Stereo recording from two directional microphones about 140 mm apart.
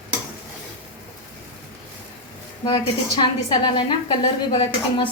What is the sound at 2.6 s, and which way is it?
A woman's voice, 35° left (ahead or behind).